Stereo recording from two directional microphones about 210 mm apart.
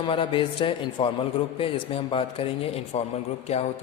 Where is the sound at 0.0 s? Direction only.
25° left (ahead or behind).